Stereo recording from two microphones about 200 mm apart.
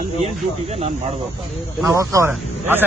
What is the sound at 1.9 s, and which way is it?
Speech, 15° right (ahead or behind).